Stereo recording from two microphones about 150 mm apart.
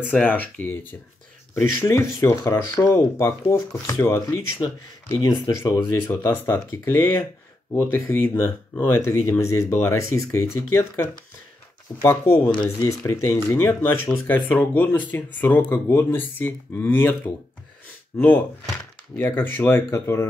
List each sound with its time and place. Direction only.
0.1 s speech: 10° left (ahead or behind)